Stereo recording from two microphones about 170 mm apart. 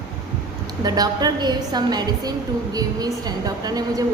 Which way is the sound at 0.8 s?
25° right (ahead or behind).